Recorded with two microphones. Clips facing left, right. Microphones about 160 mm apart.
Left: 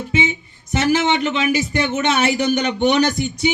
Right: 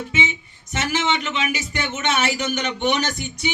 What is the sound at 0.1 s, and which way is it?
Speech, 35° left (ahead or behind).